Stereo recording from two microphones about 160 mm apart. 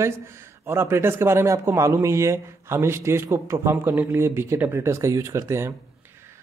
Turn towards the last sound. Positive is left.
turn(degrees=-15)  # may be behind; listen again after turning